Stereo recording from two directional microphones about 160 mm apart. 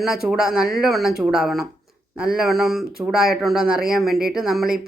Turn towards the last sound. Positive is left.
turn(degrees=-5)  # may be behind; listen again after turning